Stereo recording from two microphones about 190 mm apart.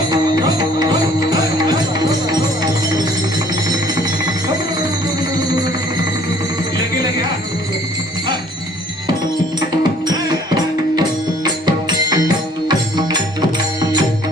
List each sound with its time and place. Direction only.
0.1 s music: 20° right (ahead or behind)
10.1 s music: 20° right (ahead or behind)